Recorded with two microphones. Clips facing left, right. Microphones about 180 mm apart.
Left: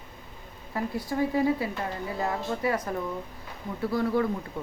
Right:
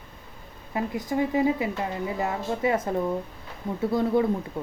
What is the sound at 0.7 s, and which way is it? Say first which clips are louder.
Speech: right 3 dB; 20° right (ahead or behind).